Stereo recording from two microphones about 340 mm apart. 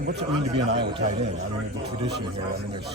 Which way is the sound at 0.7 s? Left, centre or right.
Right.